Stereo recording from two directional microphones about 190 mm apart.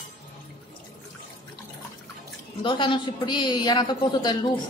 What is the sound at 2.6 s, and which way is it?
A man's voice, 25° left (ahead or behind).